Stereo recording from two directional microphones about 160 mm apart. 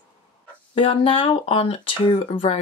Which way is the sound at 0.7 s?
35° left (ahead or behind).